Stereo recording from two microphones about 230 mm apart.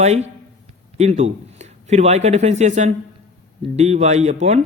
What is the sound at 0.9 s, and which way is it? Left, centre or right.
A man's voice, right.